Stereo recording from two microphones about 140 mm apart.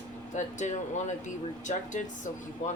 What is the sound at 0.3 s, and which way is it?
Speech, 60° left (ahead or behind).